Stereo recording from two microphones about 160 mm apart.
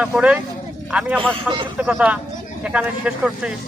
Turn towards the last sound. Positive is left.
turn(degrees=-5)  # may be behind; listen again after turning